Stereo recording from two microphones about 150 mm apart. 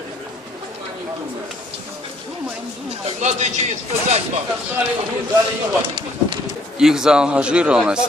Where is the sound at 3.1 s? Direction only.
50° right (ahead or behind).